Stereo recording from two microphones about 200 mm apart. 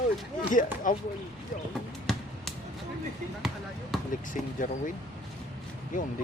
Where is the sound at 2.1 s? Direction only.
Centre (ahead or behind).